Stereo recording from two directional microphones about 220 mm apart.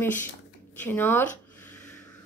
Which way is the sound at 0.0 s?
10° left (ahead or behind).